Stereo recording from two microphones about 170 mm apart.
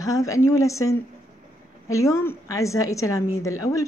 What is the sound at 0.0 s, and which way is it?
A woman's voice, 20° left (ahead or behind).